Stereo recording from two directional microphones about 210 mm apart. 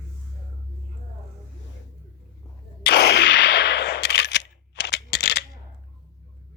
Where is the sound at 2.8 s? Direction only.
55° left (ahead or behind).